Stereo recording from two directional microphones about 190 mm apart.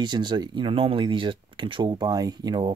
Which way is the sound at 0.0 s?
25° right (ahead or behind).